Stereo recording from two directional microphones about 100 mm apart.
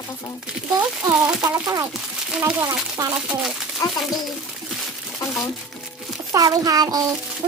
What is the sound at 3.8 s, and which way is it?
Speech, 35° left (ahead or behind).